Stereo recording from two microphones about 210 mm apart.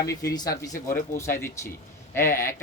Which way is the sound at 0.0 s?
15° left (ahead or behind).